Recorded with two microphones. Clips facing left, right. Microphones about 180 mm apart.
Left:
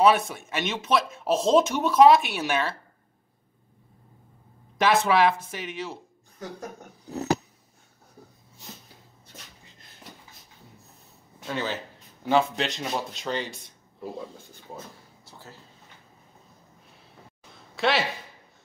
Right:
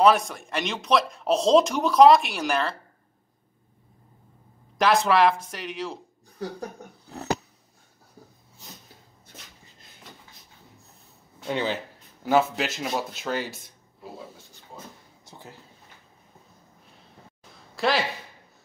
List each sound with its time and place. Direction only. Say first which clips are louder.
0.0 s speech: right 1 dB; centre (ahead or behind)
4.7 s speech: right 1 dB; centre (ahead or behind)
11.4 s speech: right 3 dB; 15° right (ahead or behind)
12.3 s speech: right 1 dB; 5° right (ahead or behind)
15.2 s speech: right 2 dB; 15° right (ahead or behind)
17.7 s speech: even; centre (ahead or behind)